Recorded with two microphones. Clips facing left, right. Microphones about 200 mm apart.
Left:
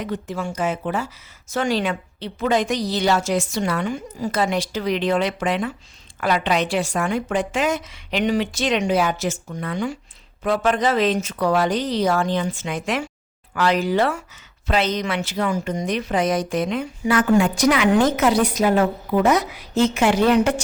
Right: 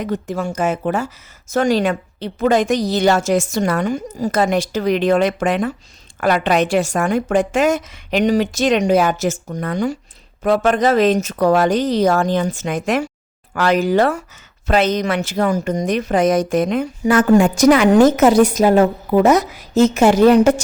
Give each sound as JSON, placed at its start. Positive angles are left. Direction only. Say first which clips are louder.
{"t": 0.0, "sound": "a woman's voice", "louder": "right 5 dB", "side_deg": -45}